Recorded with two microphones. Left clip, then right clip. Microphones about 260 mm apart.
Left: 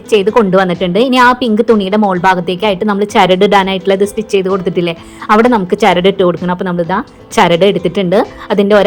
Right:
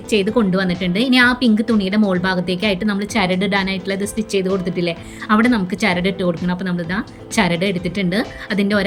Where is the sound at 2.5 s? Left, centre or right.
Centre.